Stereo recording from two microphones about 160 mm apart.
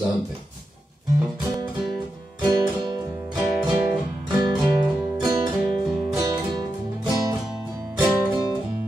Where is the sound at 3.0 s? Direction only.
15° right (ahead or behind).